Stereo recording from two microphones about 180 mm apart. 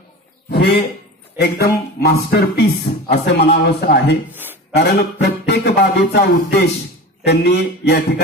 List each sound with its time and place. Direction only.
0.5 s a sound: 65° left (ahead or behind)
1.4 s a man's voice: 60° left (ahead or behind)
4.3 s speech: 10° right (ahead or behind)
4.7 s a man's voice: 65° left (ahead or behind)